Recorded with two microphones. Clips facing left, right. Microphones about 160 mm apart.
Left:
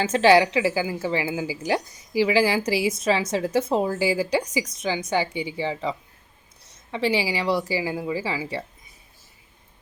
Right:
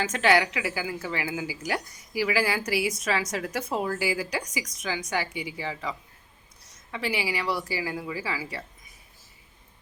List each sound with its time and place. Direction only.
0.0 s a woman's voice: 30° left (ahead or behind)